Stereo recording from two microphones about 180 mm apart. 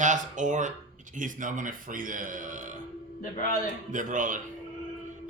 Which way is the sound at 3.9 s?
45° right (ahead or behind).